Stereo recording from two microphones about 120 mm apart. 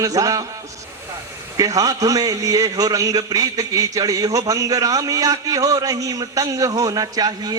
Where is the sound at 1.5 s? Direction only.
30° right (ahead or behind).